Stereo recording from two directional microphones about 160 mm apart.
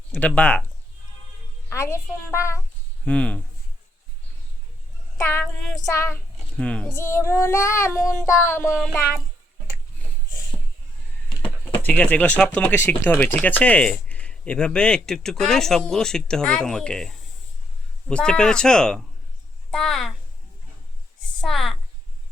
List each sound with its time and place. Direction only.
0.1 s speech: 10° left (ahead or behind)
1.7 s child singing: 15° left (ahead or behind)
3.0 s speech: 10° left (ahead or behind)
5.1 s speech: 15° left (ahead or behind)
5.5 s child singing: centre (ahead or behind)
5.8 s a child's voice: 20° left (ahead or behind)
6.9 s child singing: 15° left (ahead or behind)
11.8 s child singing: 10° left (ahead or behind)
12.4 s speech: 10° left (ahead or behind)
21.4 s a sound: centre (ahead or behind)